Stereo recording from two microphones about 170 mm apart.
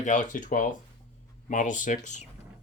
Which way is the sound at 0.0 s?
45° left (ahead or behind).